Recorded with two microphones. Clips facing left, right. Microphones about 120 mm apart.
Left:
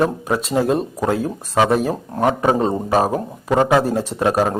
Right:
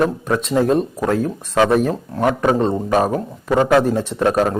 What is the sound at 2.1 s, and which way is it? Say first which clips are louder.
Speech: even; 20° left (ahead or behind).